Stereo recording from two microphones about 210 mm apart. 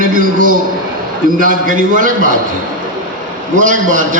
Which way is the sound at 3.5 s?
40° right (ahead or behind).